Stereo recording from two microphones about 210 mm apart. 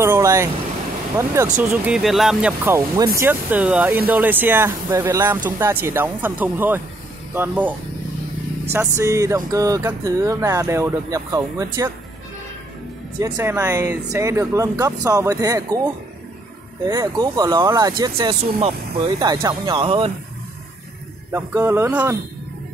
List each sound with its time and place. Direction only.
0.0 s a sound: 15° right (ahead or behind)
1.1 s speech: 15° right (ahead or behind)
8.7 s speech: 15° right (ahead or behind)
13.2 s speech: 10° right (ahead or behind)
21.3 s speech: 10° right (ahead or behind)